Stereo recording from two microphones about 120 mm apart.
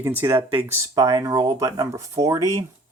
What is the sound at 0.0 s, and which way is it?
Speech, 20° right (ahead or behind).